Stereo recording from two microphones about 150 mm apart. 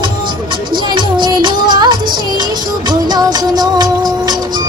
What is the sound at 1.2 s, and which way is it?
Music of bollywood, 30° right (ahead or behind).